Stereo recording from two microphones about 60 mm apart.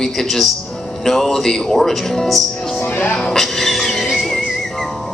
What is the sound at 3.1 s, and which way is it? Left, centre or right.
Music, centre.